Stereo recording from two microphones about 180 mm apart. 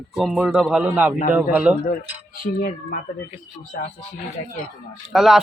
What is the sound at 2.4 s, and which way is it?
Speech, 50° left (ahead or behind).